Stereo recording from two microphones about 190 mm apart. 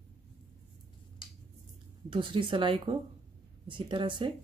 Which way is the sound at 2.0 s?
25° right (ahead or behind).